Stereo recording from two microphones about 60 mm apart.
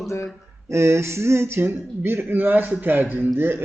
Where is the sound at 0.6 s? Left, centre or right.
Right.